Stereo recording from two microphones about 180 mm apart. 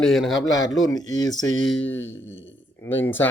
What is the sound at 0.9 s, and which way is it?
Speech, 20° left (ahead or behind).